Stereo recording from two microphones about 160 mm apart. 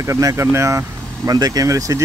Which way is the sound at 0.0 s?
20° right (ahead or behind).